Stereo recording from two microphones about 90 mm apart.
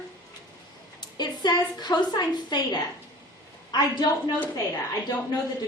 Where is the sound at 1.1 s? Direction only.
50° left (ahead or behind).